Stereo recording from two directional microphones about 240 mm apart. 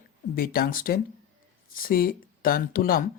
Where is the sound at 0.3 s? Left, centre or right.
Left.